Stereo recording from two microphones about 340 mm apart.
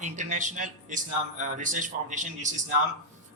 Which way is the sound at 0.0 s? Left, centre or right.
Right.